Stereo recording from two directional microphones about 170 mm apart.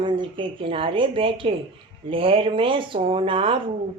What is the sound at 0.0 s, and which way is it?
Speech, 30° right (ahead or behind).